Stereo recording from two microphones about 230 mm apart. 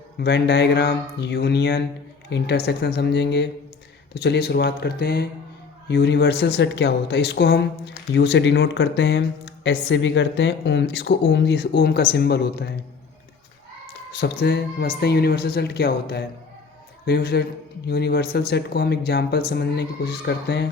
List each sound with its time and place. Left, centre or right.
0.2 s speech: left
14.1 s speech: left